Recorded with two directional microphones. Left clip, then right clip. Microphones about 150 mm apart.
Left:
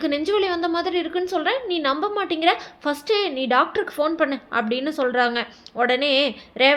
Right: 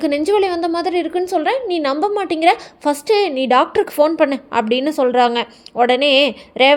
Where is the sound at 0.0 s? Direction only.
35° right (ahead or behind).